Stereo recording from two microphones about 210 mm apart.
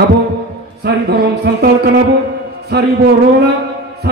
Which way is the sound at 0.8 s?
50° right (ahead or behind).